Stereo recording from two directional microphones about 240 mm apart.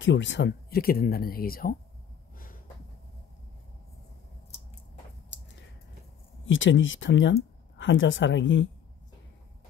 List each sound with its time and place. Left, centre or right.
0.0 s speech: left
6.4 s speech: left